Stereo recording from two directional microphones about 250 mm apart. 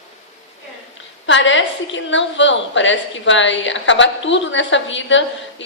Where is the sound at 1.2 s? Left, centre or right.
Left.